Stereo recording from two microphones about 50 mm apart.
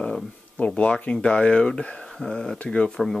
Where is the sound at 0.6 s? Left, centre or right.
Left.